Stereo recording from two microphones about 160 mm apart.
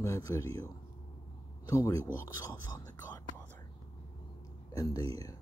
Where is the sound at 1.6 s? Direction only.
20° left (ahead or behind).